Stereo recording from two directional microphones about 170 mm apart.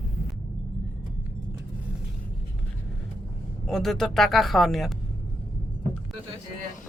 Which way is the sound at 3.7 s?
Centre (ahead or behind).